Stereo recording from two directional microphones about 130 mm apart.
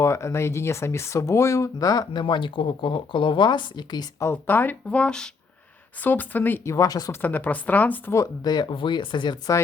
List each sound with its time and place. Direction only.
0.0 s speech: 20° left (ahead or behind)
4.2 s speech: 15° left (ahead or behind)
6.7 s speech: 30° left (ahead or behind)
7.2 s speech: 15° left (ahead or behind); by 9.6 s 35° left (ahead or behind)